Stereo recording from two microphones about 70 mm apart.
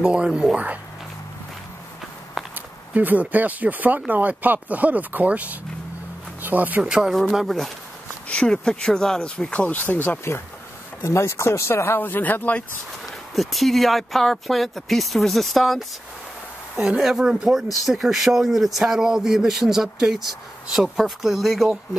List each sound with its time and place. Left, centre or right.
0.0 s speech: centre
2.5 s speech: right
6.8 s speech: centre
8.3 s speech: centre
11.1 s speech: left
13.3 s speech: centre
16.7 s speech: centre